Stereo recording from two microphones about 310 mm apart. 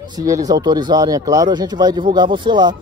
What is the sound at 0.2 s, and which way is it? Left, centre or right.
Speech, centre.